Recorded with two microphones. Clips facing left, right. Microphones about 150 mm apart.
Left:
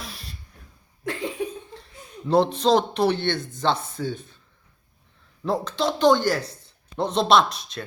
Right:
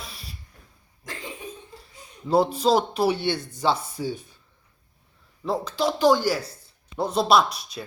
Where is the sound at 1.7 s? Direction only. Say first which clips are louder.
Left 5 dB; 5° right (ahead or behind).